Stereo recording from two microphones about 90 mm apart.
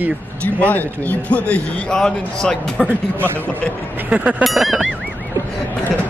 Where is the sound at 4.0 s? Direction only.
15° right (ahead or behind).